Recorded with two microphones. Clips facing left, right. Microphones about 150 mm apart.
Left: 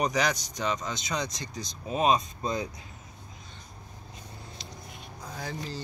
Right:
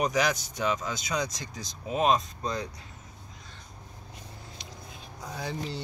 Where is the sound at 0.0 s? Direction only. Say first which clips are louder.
Right 1 dB; 5° right (ahead or behind).